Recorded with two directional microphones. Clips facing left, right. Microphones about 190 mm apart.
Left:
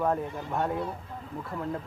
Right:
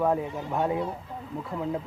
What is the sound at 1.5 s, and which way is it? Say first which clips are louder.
Speech: right 3 dB; 15° right (ahead or behind).